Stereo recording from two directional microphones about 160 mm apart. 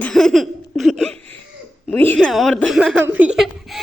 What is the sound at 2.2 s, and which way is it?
A woman's voice, centre (ahead or behind).